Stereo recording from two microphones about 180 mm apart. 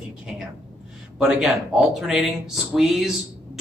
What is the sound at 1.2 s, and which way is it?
Speech, centre (ahead or behind).